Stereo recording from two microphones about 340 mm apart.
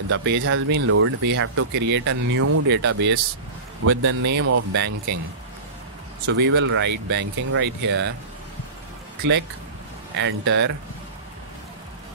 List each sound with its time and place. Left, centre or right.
0.1 s speech: right
6.2 s speech: right
10.1 s speech: right